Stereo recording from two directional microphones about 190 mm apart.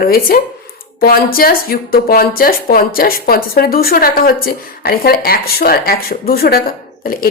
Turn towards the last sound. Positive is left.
turn(degrees=50)  # may be behind; listen again after turning